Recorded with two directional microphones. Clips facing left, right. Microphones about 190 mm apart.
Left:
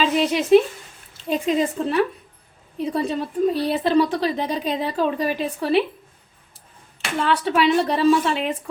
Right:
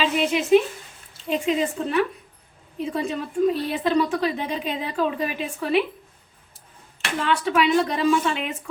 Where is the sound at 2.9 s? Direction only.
35° left (ahead or behind).